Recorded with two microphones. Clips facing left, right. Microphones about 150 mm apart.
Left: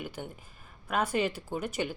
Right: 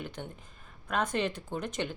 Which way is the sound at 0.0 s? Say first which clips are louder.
Left 1 dB; 5° left (ahead or behind).